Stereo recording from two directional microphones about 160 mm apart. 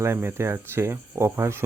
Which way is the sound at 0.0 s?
15° right (ahead or behind).